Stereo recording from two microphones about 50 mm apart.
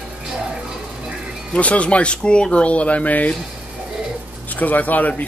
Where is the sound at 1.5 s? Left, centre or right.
Left.